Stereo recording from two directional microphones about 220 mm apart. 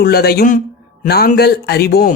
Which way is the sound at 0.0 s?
45° left (ahead or behind).